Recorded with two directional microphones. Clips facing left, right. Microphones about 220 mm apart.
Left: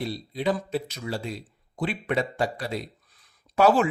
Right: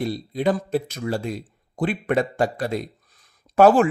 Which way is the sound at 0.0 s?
50° right (ahead or behind).